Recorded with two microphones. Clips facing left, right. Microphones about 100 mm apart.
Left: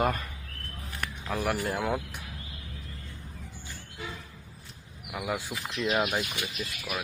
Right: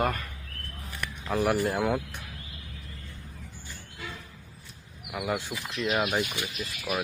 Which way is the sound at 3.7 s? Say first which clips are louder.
Left 1 dB; 20° left (ahead or behind).